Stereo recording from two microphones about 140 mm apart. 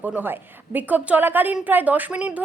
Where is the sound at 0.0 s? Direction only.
10° right (ahead or behind).